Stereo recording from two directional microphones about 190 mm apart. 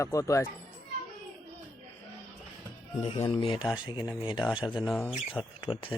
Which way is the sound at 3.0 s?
30° left (ahead or behind).